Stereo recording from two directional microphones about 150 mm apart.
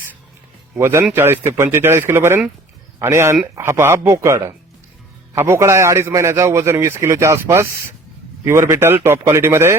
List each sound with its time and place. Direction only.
0.8 s a man's voice: 15° right (ahead or behind)